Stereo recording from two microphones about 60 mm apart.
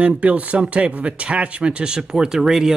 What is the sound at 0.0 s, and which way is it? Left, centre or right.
Speech, right.